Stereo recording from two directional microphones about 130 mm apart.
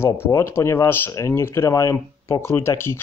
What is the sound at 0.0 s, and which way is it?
Speech, 20° left (ahead or behind).